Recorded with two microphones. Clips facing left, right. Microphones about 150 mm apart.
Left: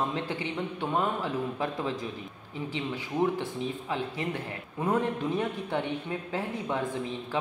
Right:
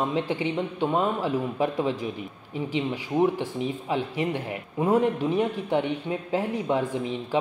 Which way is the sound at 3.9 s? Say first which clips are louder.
Right 7 dB; 20° right (ahead or behind).